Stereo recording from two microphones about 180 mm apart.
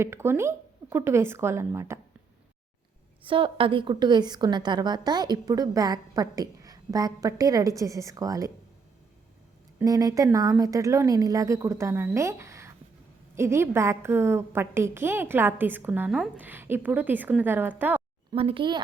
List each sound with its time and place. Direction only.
0.0 s a woman's voice: 15° right (ahead or behind)
3.2 s a woman's voice: 30° right (ahead or behind)
9.7 s a woman's voice: 20° right (ahead or behind)
18.3 s a woman's voice: 30° right (ahead or behind)